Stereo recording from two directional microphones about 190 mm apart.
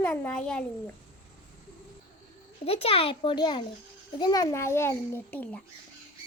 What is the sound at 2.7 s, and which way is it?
A child's voice, 30° left (ahead or behind).